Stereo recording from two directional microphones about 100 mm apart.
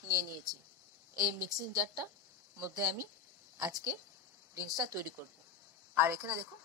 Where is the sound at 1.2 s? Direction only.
40° right (ahead or behind).